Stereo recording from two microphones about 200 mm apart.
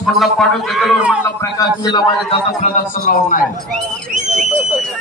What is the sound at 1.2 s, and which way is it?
Speech, 15° left (ahead or behind).